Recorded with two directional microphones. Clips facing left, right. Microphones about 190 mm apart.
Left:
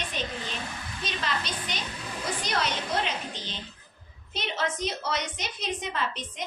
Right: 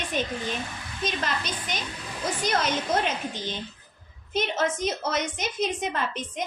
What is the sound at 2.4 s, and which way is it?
A woman's voice, 45° right (ahead or behind).